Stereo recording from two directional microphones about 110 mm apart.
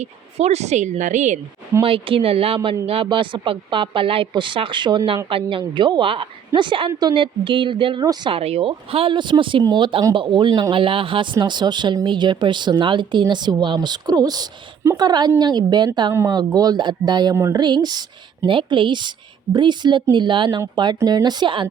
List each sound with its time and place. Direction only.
0.0 s a woman's voice: 75° right (ahead or behind)
1.8 s a woman's voice: 55° right (ahead or behind)
8.0 s speech: 40° right (ahead or behind)
8.3 s a woman's voice: 65° right (ahead or behind); by 17.3 s 40° right (ahead or behind)
17.3 s speech: 25° right (ahead or behind)
17.6 s speech: 40° right (ahead or behind)
18.4 s a woman's voice: 50° right (ahead or behind)